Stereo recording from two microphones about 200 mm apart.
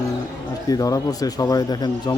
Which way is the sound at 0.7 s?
20° left (ahead or behind).